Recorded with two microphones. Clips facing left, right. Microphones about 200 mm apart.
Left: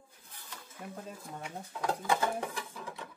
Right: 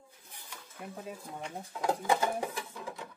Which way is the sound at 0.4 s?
10° right (ahead or behind).